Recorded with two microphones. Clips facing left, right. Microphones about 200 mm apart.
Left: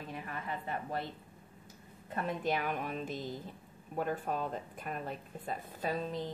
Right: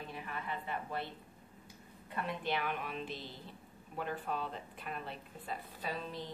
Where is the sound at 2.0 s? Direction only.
45° left (ahead or behind).